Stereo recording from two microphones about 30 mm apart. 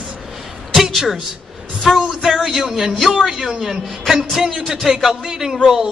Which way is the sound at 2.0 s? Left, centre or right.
Centre.